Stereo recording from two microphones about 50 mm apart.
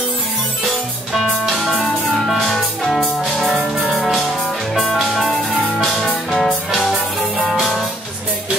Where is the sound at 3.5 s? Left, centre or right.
Centre.